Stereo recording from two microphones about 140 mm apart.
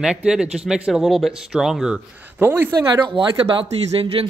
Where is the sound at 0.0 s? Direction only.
5° right (ahead or behind).